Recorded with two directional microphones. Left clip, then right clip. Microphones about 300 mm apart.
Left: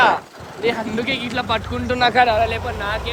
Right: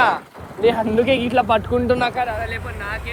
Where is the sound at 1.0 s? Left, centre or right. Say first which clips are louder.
Right 5 dB; centre.